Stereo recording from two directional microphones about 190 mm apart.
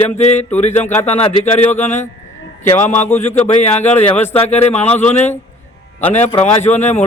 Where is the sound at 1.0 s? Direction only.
35° left (ahead or behind).